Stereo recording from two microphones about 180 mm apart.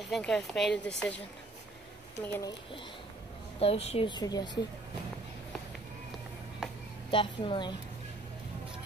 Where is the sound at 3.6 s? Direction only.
35° left (ahead or behind).